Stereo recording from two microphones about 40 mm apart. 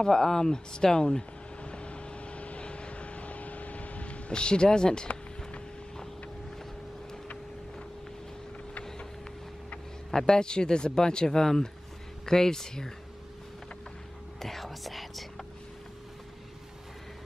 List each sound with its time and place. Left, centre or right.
0.0 s a sound: centre; by 4.2 s left
4.3 s speech: left
10.1 s speech: centre
14.4 s whispering: centre